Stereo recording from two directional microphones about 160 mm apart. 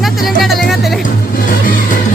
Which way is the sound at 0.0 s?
Centre (ahead or behind).